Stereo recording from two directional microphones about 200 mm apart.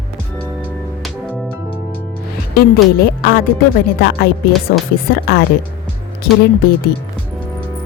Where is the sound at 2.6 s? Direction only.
50° left (ahead or behind).